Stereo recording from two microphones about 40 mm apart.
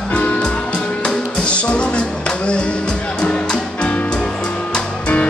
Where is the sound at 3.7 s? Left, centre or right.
Left.